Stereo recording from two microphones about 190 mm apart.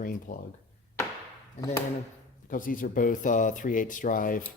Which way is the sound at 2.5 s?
45° left (ahead or behind).